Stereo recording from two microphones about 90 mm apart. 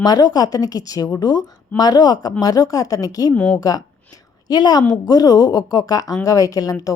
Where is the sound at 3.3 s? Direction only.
10° left (ahead or behind).